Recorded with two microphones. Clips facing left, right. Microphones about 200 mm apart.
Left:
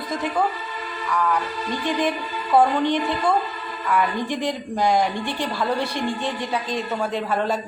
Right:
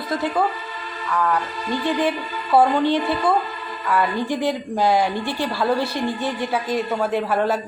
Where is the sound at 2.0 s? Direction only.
5° right (ahead or behind).